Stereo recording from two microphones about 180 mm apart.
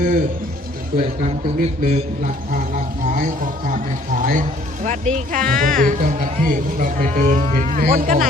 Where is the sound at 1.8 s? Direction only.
40° right (ahead or behind).